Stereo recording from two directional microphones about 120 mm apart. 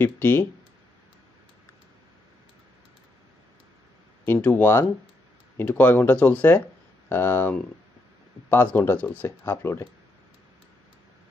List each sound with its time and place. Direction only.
0.0 s speech: 15° left (ahead or behind)
4.3 s speech: 15° left (ahead or behind)